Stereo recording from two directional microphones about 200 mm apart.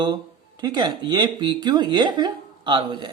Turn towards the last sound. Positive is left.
turn(degrees=-25)  # may be behind; listen again after turning